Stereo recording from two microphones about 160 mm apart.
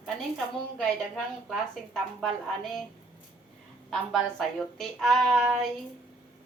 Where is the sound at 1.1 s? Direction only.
5° left (ahead or behind).